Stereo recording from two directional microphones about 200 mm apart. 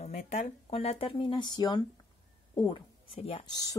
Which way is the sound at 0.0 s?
35° left (ahead or behind).